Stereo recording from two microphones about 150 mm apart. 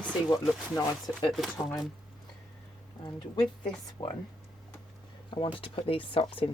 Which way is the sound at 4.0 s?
30° left (ahead or behind).